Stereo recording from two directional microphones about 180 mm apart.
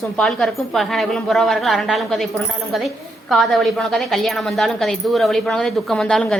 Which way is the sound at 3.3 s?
Centre (ahead or behind).